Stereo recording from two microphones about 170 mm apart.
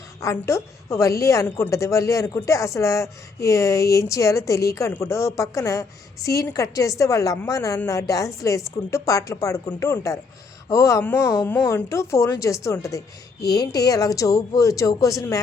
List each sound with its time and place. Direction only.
0.2 s a woman's voice: 15° left (ahead or behind)